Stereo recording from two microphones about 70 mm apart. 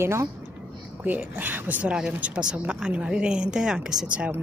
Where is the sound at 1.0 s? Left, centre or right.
Right.